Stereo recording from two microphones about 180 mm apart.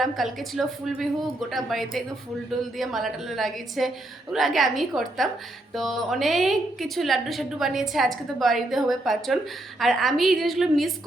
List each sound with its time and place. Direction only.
0.0 s a woman's voice: centre (ahead or behind)